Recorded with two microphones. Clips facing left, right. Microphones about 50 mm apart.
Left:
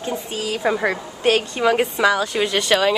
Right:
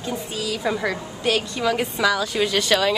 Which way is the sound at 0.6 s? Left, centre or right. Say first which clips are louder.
Left 5 dB; left.